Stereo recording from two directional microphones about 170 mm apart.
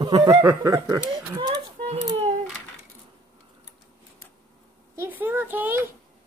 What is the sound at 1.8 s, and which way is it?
Baby cry, 35° right (ahead or behind).